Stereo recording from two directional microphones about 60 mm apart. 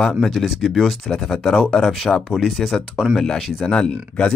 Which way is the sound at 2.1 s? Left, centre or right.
Centre.